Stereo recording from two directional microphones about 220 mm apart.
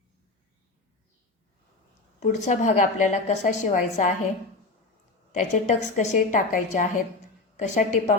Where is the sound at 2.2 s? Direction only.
35° left (ahead or behind).